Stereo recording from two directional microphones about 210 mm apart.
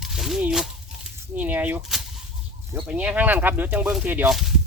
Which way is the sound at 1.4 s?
10° right (ahead or behind).